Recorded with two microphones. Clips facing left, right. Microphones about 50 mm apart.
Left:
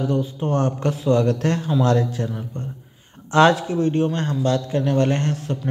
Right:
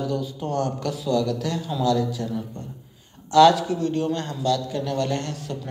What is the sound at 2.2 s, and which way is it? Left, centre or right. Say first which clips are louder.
Speech: left 1 dB; left.